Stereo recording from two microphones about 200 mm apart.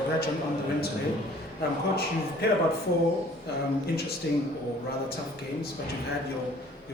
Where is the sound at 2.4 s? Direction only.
55° left (ahead or behind).